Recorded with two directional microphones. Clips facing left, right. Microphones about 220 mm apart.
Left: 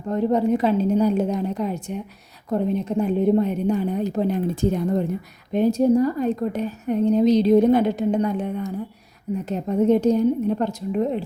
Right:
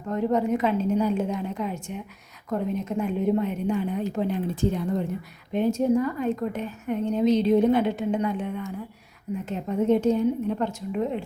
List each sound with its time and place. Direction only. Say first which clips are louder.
0.1 s a woman's voice: left 4 dB; 30° left (ahead or behind)